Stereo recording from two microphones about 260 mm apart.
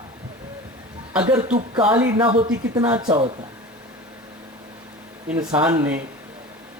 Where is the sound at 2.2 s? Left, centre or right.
Right.